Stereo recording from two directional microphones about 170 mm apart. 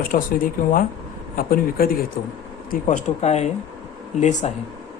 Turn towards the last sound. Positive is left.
turn(degrees=45)  # may be behind; listen again after turning